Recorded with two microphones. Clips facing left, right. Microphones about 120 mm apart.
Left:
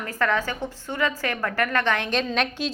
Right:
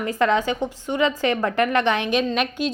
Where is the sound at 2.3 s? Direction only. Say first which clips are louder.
Right 3 dB; centre (ahead or behind).